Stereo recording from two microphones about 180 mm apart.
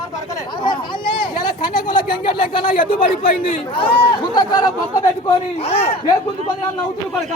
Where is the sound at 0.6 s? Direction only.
25° left (ahead or behind).